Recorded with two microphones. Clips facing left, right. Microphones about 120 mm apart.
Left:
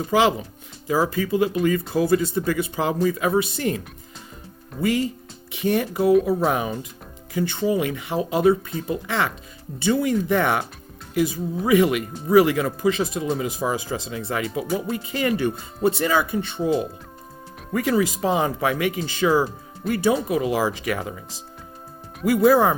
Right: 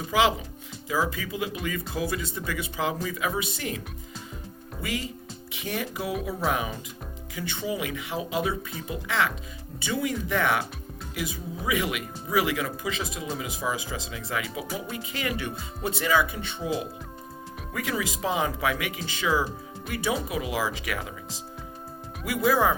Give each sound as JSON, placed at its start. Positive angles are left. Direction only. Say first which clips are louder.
{"t": 0.1, "sound": "speech", "louder": "left 4 dB", "side_deg": 45}
{"t": 4.8, "sound": "speech", "louder": "left 10 dB", "side_deg": 45}
{"t": 11.6, "sound": "speech", "louder": "left 10 dB", "side_deg": 45}
{"t": 17.7, "sound": "speech", "louder": "left 9 dB", "side_deg": 40}
{"t": 22.4, "sound": "speech", "louder": "left 6 dB", "side_deg": 40}